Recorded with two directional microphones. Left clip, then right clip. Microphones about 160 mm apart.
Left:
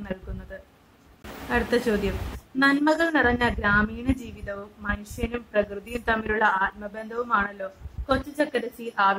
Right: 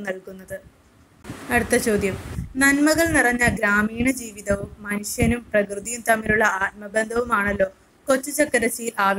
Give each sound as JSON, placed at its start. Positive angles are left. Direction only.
{"t": 1.5, "sound": "a woman's voice", "side_deg": -25}